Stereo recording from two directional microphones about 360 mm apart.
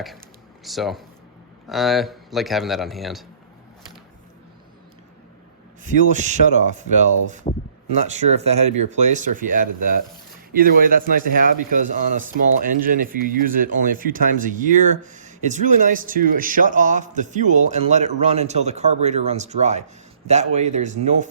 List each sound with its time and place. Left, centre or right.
0.6 s a man's voice: centre
5.8 s a man's voice: centre